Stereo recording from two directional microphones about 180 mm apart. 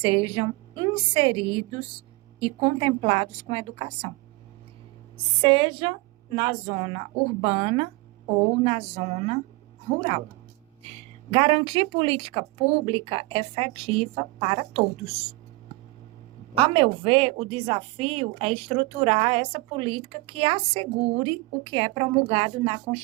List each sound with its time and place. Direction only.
0.0 s a woman's voice: 30° right (ahead or behind)
5.1 s a woman's voice: 30° right (ahead or behind)
11.3 s a woman's voice: 30° right (ahead or behind)
16.6 s a woman's voice: 30° right (ahead or behind)